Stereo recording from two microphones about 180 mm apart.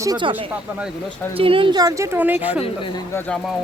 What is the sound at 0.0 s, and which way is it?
A woman's voice, 25° right (ahead or behind).